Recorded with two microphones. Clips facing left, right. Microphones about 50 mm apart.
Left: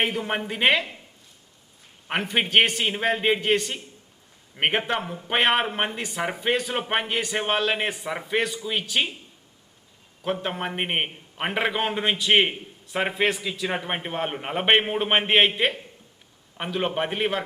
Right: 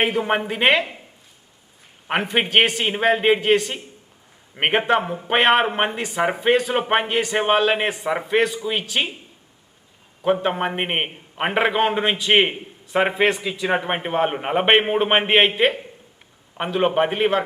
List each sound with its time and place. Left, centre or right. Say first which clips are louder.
0.0 s a man's voice: right 5 dB; centre
2.0 s a man's voice: right 4 dB; centre
10.5 s a man's voice: right 4 dB; centre